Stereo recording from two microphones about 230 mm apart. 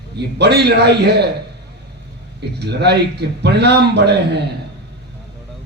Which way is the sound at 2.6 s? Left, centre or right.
Right.